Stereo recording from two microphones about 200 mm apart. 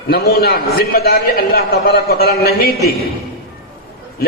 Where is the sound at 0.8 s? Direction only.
50° left (ahead or behind).